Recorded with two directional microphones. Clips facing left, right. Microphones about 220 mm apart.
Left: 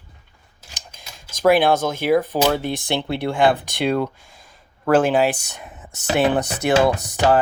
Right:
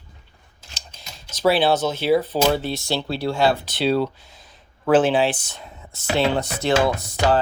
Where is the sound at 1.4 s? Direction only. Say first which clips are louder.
Left 2 dB; 10° left (ahead or behind).